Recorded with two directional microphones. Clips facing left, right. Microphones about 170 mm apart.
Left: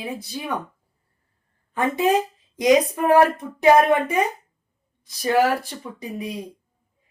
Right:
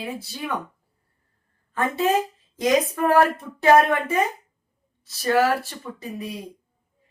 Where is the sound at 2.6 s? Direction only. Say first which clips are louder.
Left 3 dB; 15° left (ahead or behind).